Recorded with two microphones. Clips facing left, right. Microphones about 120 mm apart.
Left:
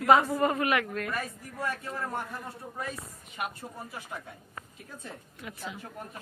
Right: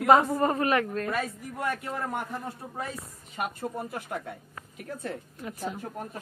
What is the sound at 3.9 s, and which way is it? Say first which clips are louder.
A woman's voice: right 6 dB; 60° right (ahead or behind).